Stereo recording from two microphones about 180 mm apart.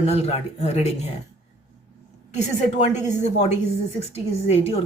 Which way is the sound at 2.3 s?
40° left (ahead or behind).